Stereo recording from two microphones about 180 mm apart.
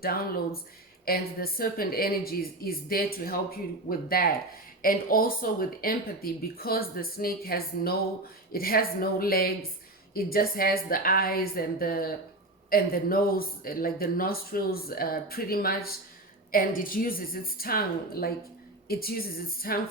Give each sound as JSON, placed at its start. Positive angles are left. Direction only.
{"t": 0.0, "sound": "speech", "side_deg": 55}